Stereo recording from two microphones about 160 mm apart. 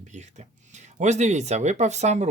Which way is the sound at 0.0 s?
45° right (ahead or behind).